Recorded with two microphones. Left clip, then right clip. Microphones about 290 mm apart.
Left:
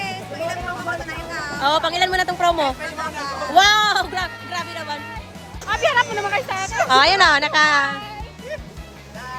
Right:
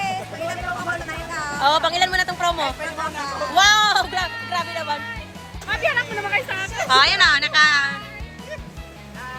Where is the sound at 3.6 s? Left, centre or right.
Centre.